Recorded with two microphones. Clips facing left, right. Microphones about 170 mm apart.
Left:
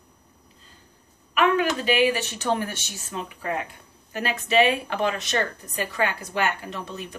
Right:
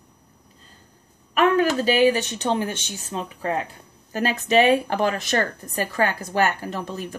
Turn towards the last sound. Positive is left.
turn(degrees=-40)  # may be behind; listen again after turning